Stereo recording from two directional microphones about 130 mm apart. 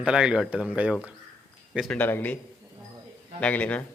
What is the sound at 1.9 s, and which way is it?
Speech, 15° left (ahead or behind).